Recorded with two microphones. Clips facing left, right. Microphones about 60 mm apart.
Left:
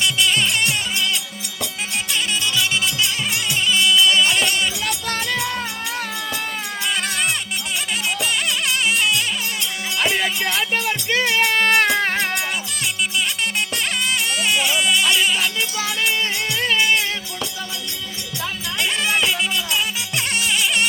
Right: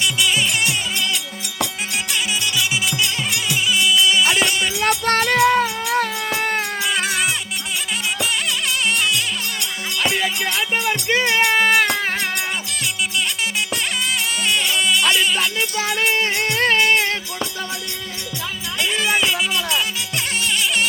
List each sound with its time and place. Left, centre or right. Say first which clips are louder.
0.0 s music: even; centre
3.3 s music: even; centre
4.8 s music: right 7 dB; right
6.8 s music: left 1 dB; centre
10.0 s music: even; centre
10.8 s music: right 2 dB; centre
14.4 s music: even; centre
15.8 s music: right 3 dB; right
18.8 s music: right 1 dB; centre
20.4 s music: even; centre